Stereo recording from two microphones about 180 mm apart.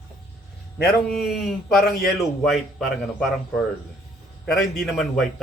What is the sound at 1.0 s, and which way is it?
Speech, centre (ahead or behind).